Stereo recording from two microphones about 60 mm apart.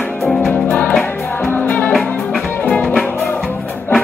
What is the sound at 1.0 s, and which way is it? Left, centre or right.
Music, left.